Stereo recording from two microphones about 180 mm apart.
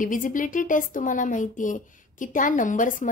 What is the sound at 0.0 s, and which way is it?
Speech, 45° left (ahead or behind).